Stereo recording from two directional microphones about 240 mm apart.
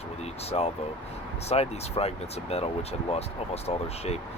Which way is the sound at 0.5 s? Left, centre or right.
Left.